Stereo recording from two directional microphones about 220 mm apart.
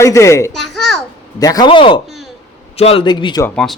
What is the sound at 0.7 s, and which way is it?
Babbling, centre (ahead or behind).